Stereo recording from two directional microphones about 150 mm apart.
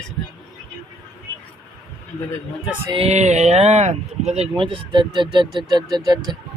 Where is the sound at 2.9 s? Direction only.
40° right (ahead or behind).